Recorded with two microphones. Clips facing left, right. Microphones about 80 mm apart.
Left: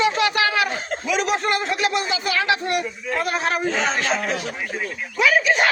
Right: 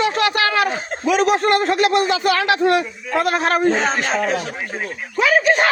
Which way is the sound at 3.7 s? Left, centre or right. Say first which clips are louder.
Right 3 dB; right.